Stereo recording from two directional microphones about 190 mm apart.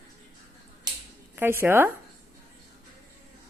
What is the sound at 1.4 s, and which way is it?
Speech, 10° right (ahead or behind).